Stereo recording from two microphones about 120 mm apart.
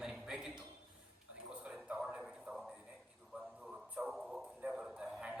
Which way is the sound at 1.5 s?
10° right (ahead or behind).